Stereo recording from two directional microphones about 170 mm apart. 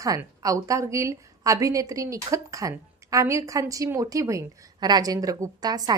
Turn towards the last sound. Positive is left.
turn(degrees=-25)  # may be behind; listen again after turning